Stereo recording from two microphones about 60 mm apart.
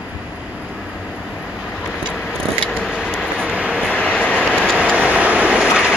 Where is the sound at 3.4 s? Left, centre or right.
Centre.